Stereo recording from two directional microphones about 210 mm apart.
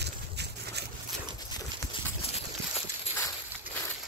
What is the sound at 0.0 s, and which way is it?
Boat, 55° right (ahead or behind).